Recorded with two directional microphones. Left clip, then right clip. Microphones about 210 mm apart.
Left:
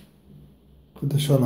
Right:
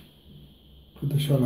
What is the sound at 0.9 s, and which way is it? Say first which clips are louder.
Speech: left 4 dB; 20° left (ahead or behind).